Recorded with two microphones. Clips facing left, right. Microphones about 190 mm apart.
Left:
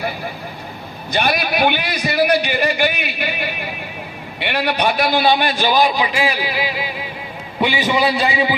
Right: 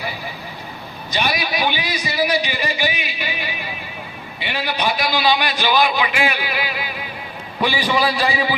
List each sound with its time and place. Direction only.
1.1 s a man's voice: 55° left (ahead or behind); by 8.5 s 20° left (ahead or behind)